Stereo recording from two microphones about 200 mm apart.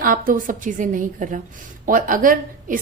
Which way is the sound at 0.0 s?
45° right (ahead or behind).